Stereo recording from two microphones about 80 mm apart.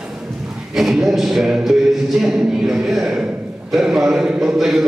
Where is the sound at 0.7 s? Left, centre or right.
Centre.